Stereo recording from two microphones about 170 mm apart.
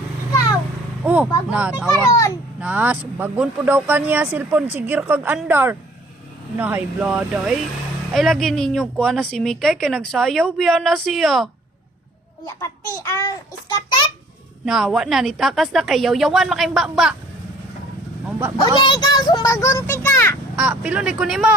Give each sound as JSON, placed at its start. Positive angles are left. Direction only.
{"t": 1.0, "sound": "a woman's voice", "side_deg": -10}
{"t": 13.0, "sound": "a child's voice", "side_deg": 20}
{"t": 14.6, "sound": "a woman's voice", "side_deg": -5}
{"t": 18.3, "sound": "speech", "side_deg": -5}
{"t": 18.6, "sound": "a child's voice", "side_deg": 25}
{"t": 20.6, "sound": "speech", "side_deg": -5}